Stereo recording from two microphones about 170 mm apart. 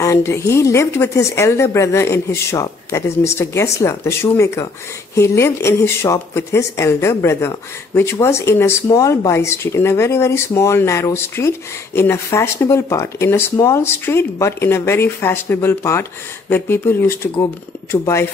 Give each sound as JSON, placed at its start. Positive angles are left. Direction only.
{"t": 0.0, "sound": "speech", "side_deg": 15}